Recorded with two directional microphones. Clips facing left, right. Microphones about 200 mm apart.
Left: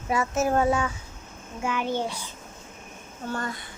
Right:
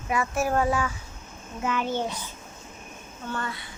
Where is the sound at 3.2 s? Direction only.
40° left (ahead or behind).